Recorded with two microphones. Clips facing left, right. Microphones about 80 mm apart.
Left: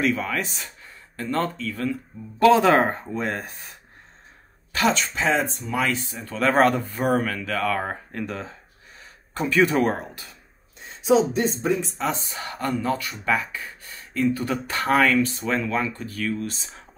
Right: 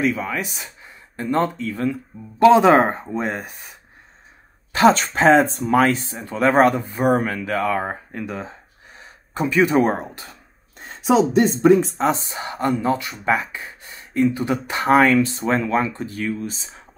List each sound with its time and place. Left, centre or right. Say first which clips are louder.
0.0 s speech: right 2 dB; centre
4.7 s speech: right 7 dB; right
5.9 s speech: right 5 dB; right
6.5 s speech: right 2 dB; centre
7.2 s speech: right 3 dB; right
8.4 s gasp: right 3 dB; right
9.3 s speech: right 2 dB; centre
9.8 s speech: right 3 dB; right
11.6 s speech: right 10 dB; right
12.0 s speech: right 6 dB; right
16.4 s speech: right 2 dB; centre